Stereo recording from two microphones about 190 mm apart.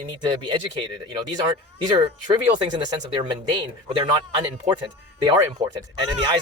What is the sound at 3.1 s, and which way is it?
Speech, 25° right (ahead or behind).